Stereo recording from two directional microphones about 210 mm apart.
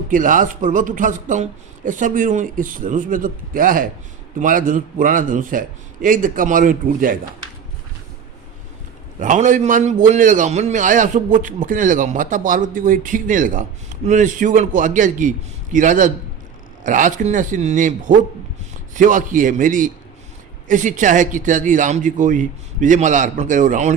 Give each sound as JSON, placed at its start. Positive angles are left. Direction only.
{"t": 0.1, "sound": "a man's voice", "side_deg": -40}
{"t": 9.2, "sound": "a man's voice", "side_deg": -35}